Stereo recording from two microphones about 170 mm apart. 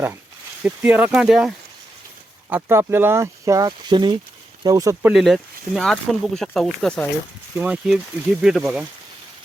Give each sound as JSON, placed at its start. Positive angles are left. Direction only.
{"t": 0.6, "sound": "speech", "side_deg": -10}
{"t": 2.5, "sound": "speech", "side_deg": -15}
{"t": 5.1, "sound": "speech", "side_deg": 0}
{"t": 7.5, "sound": "speech", "side_deg": -10}